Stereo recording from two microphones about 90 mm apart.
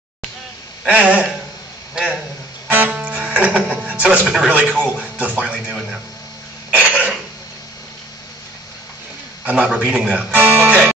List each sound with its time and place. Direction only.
0.9 s speech: 15° right (ahead or behind)
2.7 s music: 15° right (ahead or behind)
4.6 s a man's voice: 10° left (ahead or behind)
4.9 s speech: 15° right (ahead or behind)
6.8 s cough: 15° right (ahead or behind)
9.4 s a man's voice: 15° right (ahead or behind)